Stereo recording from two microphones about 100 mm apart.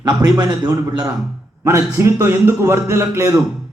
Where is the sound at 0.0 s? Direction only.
40° right (ahead or behind).